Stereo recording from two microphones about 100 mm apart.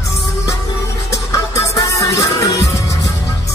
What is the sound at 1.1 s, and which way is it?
Music, 30° left (ahead or behind).